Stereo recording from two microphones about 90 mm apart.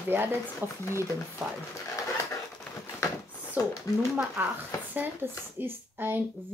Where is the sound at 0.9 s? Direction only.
35° right (ahead or behind).